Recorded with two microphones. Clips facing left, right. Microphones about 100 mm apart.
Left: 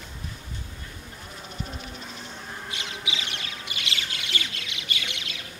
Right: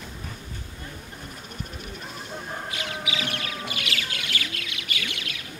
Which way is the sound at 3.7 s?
25° left (ahead or behind).